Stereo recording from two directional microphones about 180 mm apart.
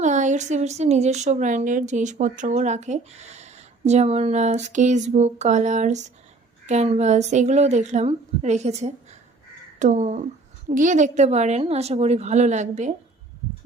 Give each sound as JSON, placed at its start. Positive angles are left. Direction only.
{"t": 0.0, "sound": "speech", "side_deg": -40}